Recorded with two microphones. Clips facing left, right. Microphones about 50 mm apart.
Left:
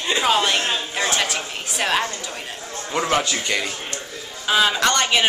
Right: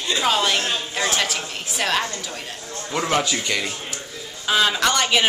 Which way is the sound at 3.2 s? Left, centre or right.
Centre.